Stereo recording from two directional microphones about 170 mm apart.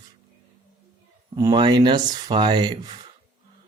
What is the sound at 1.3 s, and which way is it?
Speech, 25° right (ahead or behind).